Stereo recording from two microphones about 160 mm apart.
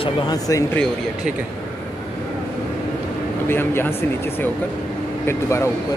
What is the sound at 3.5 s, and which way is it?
Speech, 15° left (ahead or behind).